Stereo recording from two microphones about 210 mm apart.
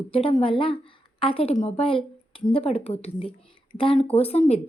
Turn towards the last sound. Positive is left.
turn(degrees=30)  # may be behind; listen again after turning